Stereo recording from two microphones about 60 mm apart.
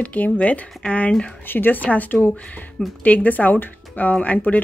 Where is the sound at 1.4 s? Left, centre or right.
Left.